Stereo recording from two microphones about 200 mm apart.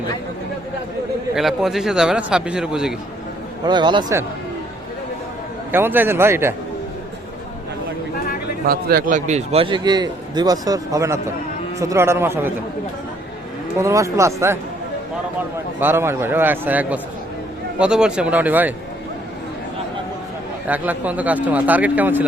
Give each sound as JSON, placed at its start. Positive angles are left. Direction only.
{"t": 1.4, "sound": "a man's voice", "side_deg": 0}
{"t": 3.7, "sound": "a man's voice", "side_deg": -20}
{"t": 5.7, "sound": "speech", "side_deg": -10}
{"t": 8.6, "sound": "a man's voice", "side_deg": -50}
{"t": 13.7, "sound": "speech", "side_deg": -15}
{"t": 15.8, "sound": "a man's voice", "side_deg": -10}
{"t": 20.7, "sound": "speech", "side_deg": -10}